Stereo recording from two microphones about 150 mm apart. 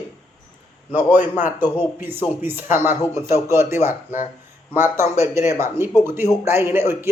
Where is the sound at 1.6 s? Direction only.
15° right (ahead or behind).